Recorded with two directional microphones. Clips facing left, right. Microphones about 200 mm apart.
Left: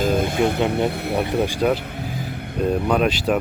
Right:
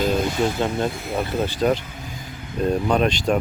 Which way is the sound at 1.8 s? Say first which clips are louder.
Left 7 dB; 60° left (ahead or behind).